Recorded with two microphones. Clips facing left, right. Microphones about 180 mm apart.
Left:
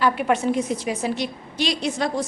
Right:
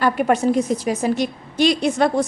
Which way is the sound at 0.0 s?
45° right (ahead or behind).